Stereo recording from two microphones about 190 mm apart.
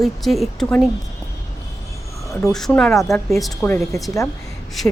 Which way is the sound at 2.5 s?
Centre (ahead or behind).